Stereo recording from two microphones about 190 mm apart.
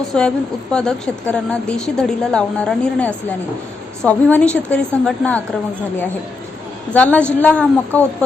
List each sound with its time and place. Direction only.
0.1 s a woman's voice: 5° left (ahead or behind)
6.9 s a woman's voice: 10° left (ahead or behind)